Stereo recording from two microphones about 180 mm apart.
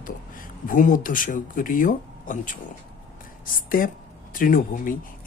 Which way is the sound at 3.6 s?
50° left (ahead or behind).